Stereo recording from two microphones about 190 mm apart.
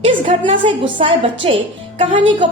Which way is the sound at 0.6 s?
25° right (ahead or behind).